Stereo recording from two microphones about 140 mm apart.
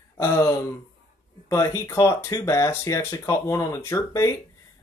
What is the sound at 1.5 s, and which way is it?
Speech, 20° left (ahead or behind).